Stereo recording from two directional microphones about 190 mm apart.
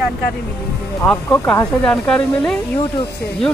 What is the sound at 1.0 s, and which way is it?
Speech, 5° left (ahead or behind).